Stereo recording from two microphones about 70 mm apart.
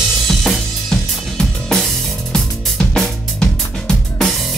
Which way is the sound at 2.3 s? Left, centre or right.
Centre.